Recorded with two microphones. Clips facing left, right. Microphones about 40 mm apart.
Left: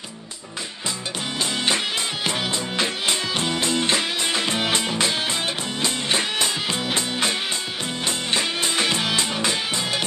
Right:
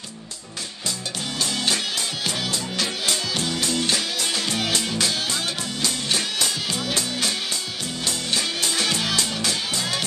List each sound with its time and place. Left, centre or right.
2.2 s music: left